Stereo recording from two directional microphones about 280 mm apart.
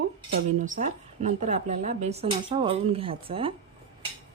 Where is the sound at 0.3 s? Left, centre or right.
Right.